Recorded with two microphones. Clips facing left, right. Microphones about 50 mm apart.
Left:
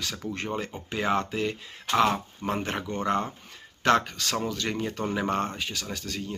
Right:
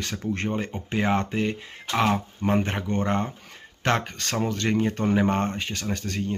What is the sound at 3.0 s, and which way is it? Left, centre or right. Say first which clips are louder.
Speech: left 1 dB; right.